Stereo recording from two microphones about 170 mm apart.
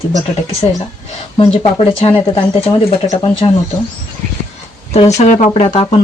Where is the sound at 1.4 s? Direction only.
30° left (ahead or behind).